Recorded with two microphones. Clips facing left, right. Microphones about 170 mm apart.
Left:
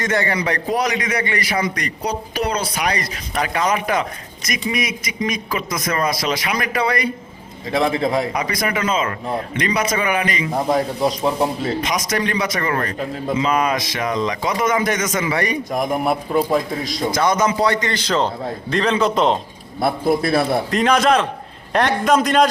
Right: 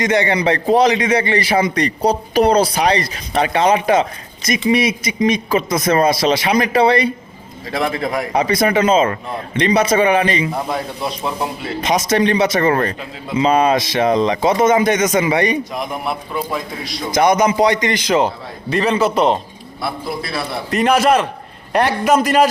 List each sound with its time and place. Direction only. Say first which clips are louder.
0.0 s a man's voice: right 5 dB; 20° right (ahead or behind)
7.7 s a man's voice: left 2 dB; 20° left (ahead or behind)
8.3 s a man's voice: right 7 dB; 30° right (ahead or behind)
10.7 s speech: left 4 dB; 40° left (ahead or behind)
11.8 s a man's voice: right 6 dB; 25° right (ahead or behind)
15.7 s a man's voice: left 4 dB; 45° left (ahead or behind)
17.1 s a man's voice: right 5 dB; 15° right (ahead or behind)
19.8 s a man's voice: left 6 dB; 50° left (ahead or behind)
20.7 s a man's voice: right 7 dB; 5° right (ahead or behind)